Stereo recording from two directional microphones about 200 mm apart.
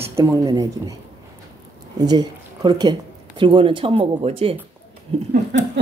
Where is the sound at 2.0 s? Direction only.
20° right (ahead or behind).